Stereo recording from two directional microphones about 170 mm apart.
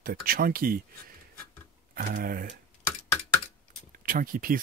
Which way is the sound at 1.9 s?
60° right (ahead or behind).